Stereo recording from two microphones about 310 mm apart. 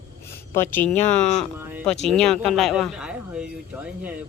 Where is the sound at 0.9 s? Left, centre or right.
Left.